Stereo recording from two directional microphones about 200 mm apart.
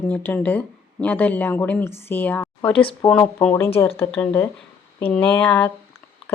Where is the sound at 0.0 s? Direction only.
10° left (ahead or behind).